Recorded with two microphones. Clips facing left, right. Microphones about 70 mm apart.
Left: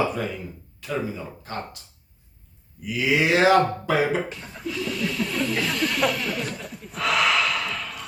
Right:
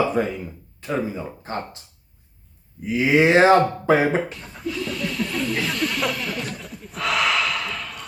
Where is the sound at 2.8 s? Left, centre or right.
Right.